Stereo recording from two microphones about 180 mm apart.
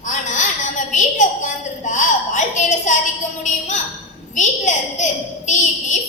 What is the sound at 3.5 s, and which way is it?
A woman's voice, 40° left (ahead or behind).